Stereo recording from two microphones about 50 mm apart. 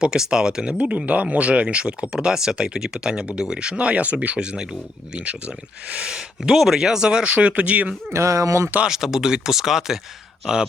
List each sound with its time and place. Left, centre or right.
0.0 s speech: centre
0.8 s speech: right
8.1 s speech: right
8.9 s speech: centre